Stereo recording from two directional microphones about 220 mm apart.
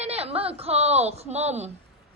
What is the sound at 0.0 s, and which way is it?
Speech, 30° right (ahead or behind).